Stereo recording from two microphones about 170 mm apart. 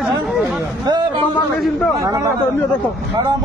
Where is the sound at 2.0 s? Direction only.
15° right (ahead or behind).